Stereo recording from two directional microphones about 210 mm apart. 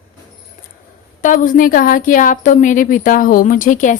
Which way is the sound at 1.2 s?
40° left (ahead or behind).